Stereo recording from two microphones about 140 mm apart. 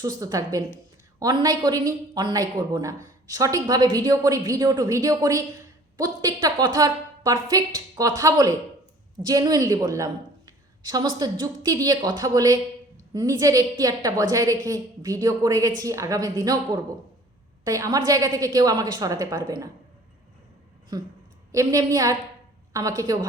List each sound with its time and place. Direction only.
0.0 s a woman's voice: 25° right (ahead or behind)
21.5 s a woman's voice: 25° right (ahead or behind)